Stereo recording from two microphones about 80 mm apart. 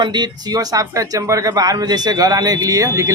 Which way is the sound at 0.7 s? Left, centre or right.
Right.